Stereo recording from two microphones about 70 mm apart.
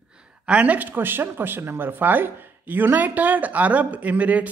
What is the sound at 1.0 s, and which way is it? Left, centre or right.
Speech, right.